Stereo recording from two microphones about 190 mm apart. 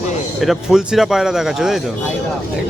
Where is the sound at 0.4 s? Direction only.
Centre (ahead or behind).